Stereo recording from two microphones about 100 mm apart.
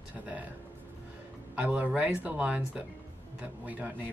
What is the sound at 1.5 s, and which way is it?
Speech, 15° right (ahead or behind).